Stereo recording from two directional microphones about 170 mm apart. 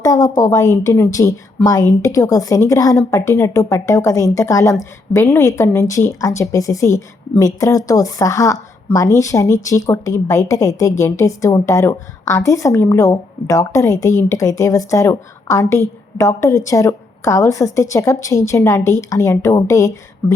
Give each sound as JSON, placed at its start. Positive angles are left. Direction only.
{"t": 0.0, "sound": "a woman's voice", "side_deg": 20}